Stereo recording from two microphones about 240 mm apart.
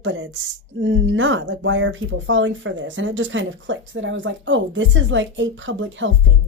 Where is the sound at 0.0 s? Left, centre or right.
Right.